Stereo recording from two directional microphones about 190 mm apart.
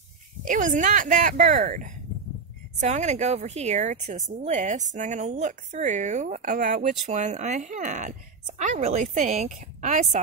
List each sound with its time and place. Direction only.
0.5 s speech: 40° right (ahead or behind)